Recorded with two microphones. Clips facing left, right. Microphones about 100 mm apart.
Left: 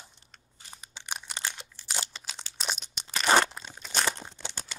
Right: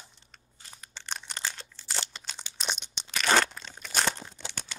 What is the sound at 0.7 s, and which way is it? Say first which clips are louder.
Crumpling: even; 15° left (ahead or behind).